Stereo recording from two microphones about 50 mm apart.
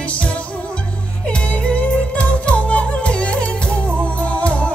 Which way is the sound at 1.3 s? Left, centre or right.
Left.